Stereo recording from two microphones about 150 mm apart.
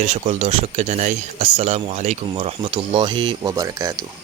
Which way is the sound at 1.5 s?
45° right (ahead or behind).